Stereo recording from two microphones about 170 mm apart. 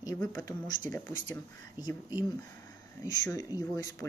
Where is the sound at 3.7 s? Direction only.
20° left (ahead or behind).